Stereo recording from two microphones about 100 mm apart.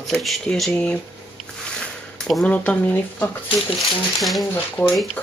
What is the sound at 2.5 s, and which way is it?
Speech, 15° left (ahead or behind).